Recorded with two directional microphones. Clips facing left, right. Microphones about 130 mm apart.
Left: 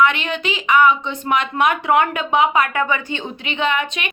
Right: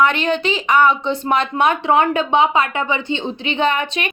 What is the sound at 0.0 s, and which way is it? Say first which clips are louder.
A woman's voice: right 2 dB; 35° right (ahead or behind).